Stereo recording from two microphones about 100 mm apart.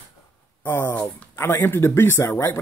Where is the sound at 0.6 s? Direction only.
20° left (ahead or behind).